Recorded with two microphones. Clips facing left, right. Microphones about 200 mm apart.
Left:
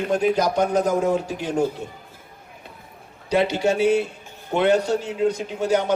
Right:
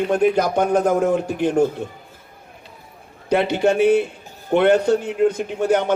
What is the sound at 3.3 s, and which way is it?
A man's voice, 55° right (ahead or behind).